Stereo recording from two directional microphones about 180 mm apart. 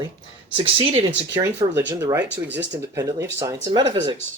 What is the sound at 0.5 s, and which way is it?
Speech, 30° right (ahead or behind).